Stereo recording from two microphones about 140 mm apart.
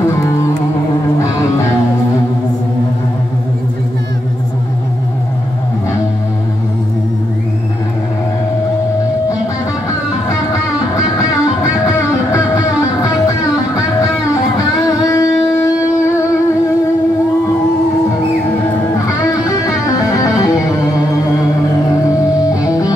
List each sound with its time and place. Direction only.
12.3 s music: 20° left (ahead or behind)
15.0 s music: 20° left (ahead or behind)
20.2 s music: 20° left (ahead or behind)